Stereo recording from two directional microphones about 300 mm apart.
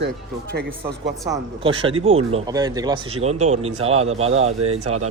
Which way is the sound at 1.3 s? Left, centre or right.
Centre.